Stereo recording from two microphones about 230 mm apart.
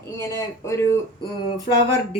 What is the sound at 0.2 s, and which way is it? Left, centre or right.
Speech, centre.